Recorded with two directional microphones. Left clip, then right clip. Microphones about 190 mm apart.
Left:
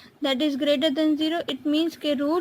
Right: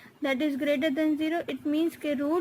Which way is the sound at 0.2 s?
30° left (ahead or behind).